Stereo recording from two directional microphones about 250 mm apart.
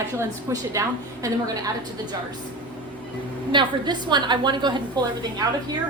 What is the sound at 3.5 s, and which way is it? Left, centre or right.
A woman's voice, centre.